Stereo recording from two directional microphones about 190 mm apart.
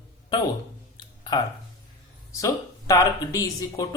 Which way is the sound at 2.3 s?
15° left (ahead or behind).